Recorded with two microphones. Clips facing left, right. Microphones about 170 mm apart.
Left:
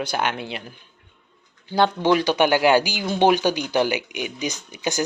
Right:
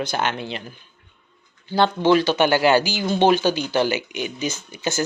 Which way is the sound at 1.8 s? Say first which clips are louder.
Right 2 dB; 15° left (ahead or behind).